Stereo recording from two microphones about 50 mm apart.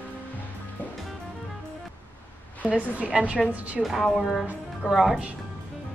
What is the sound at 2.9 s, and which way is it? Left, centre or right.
Speech, right.